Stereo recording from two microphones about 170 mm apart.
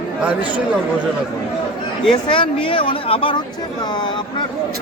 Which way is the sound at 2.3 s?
30° left (ahead or behind).